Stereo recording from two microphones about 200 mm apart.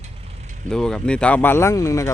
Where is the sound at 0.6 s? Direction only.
5° left (ahead or behind).